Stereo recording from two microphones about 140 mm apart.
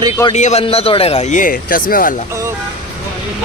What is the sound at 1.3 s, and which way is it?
Speech, 75° left (ahead or behind).